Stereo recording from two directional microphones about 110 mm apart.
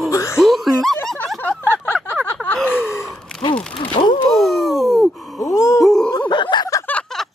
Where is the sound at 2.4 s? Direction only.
15° left (ahead or behind).